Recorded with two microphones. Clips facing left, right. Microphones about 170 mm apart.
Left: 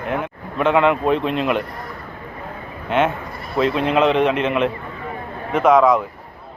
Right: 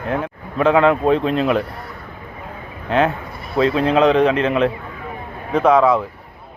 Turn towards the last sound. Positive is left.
turn(degrees=-30)  # may be behind; listen again after turning